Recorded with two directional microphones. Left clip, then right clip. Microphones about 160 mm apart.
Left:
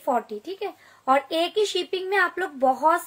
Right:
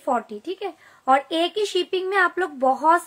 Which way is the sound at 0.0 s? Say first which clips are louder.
Right 1 dB; 35° right (ahead or behind).